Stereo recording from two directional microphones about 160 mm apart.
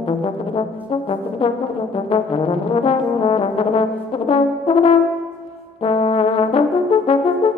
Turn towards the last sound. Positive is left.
turn(degrees=35)  # may be behind; listen again after turning